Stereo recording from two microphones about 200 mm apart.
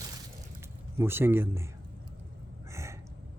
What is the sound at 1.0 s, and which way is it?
Speech, 10° right (ahead or behind).